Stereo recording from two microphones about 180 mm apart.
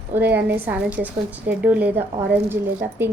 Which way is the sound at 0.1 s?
10° right (ahead or behind).